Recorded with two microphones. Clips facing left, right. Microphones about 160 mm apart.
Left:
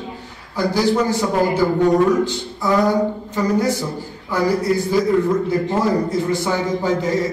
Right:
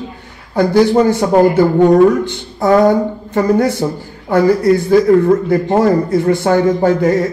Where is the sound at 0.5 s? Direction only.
55° right (ahead or behind).